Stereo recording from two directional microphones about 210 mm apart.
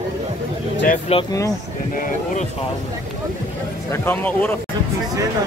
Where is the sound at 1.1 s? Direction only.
30° left (ahead or behind).